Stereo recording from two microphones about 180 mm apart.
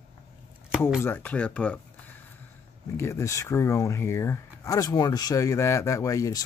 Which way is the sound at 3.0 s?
15° left (ahead or behind).